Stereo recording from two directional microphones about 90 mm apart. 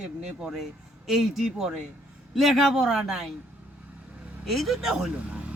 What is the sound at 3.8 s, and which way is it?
Vehicle, 15° right (ahead or behind).